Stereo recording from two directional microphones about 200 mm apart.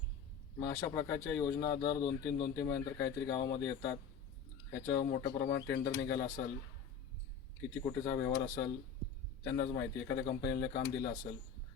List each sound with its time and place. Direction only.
0.6 s speech: 20° left (ahead or behind)
7.9 s speech: 15° left (ahead or behind)